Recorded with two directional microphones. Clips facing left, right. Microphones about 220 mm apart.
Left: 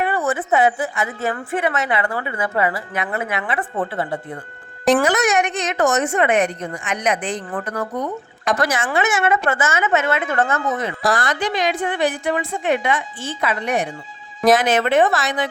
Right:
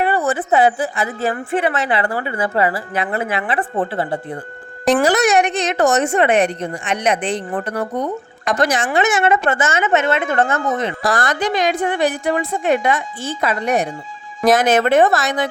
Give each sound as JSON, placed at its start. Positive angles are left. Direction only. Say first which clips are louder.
{"t": 0.0, "sound": "a woman's voice", "louder": "right 3 dB", "side_deg": -35}
{"t": 8.5, "sound": "speech", "louder": "right 1 dB", "side_deg": 0}
{"t": 8.9, "sound": "a woman's voice", "louder": "right 3 dB", "side_deg": -30}
{"t": 11.2, "sound": "a woman's voice", "louder": "right 3 dB", "side_deg": -45}